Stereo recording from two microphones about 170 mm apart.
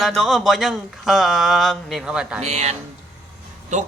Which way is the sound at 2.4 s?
40° right (ahead or behind).